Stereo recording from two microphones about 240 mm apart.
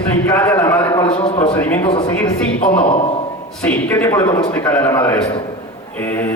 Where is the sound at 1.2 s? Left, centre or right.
Centre.